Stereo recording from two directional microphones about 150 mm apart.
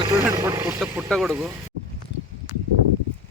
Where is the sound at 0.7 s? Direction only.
5° right (ahead or behind).